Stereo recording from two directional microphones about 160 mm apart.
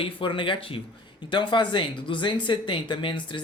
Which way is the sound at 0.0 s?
30° left (ahead or behind).